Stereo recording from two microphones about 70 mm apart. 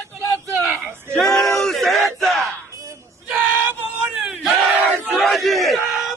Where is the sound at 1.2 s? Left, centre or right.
Centre.